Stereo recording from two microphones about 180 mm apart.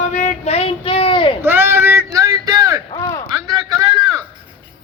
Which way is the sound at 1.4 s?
10° right (ahead or behind).